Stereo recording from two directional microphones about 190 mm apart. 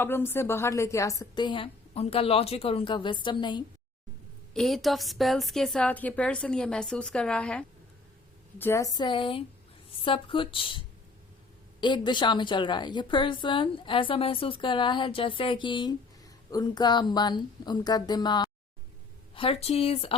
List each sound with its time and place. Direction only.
0.0 s a woman's voice: 10° left (ahead or behind)
4.5 s a woman's voice: centre (ahead or behind); by 20.1 s 30° left (ahead or behind)